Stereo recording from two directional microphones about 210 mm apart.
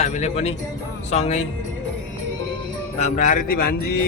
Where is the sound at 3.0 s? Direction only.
35° left (ahead or behind).